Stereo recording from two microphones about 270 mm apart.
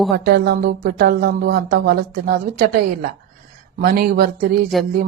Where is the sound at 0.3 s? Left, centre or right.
Right.